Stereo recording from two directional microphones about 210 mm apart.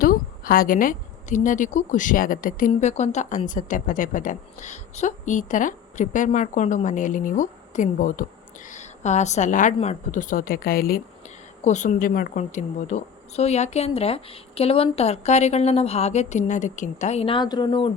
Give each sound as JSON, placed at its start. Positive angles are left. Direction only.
{"t": 0.0, "sound": "a woman's voice", "side_deg": 40}